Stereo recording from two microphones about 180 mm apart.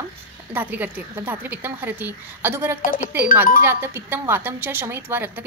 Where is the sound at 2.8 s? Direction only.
50° left (ahead or behind).